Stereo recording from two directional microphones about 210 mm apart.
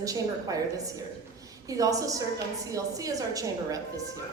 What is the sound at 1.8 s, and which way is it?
A woman's voice, 15° right (ahead or behind).